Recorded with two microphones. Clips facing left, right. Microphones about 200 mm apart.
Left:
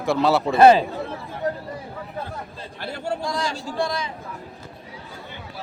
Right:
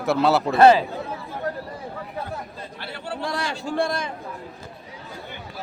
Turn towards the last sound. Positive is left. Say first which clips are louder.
# right 1 dB
turn(degrees=-55)  # may be behind; listen again after turning